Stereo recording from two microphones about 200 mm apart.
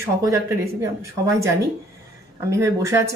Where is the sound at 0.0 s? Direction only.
15° right (ahead or behind).